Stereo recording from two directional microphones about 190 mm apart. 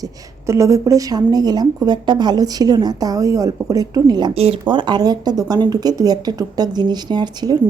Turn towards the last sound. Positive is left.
turn(degrees=-20)  # may be behind; listen again after turning